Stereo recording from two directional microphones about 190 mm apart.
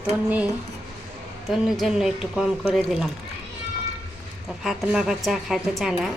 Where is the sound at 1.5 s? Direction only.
Centre (ahead or behind).